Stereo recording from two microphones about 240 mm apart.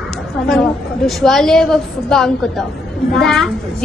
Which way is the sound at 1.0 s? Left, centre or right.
Centre.